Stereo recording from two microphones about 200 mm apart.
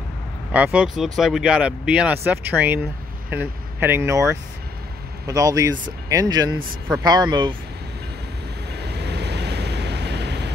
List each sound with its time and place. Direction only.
0.5 s speech: 5° right (ahead or behind); by 7.5 s 20° right (ahead or behind)
8.7 s waves: 55° right (ahead or behind)